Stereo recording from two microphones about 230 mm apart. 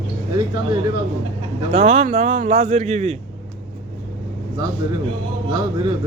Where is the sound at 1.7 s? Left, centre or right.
Right.